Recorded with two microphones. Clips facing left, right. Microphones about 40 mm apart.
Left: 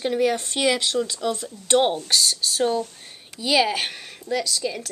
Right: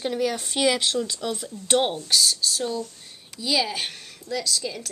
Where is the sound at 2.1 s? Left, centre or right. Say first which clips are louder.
Even; centre.